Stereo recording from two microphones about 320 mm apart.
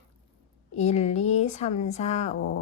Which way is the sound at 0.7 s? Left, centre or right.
Left.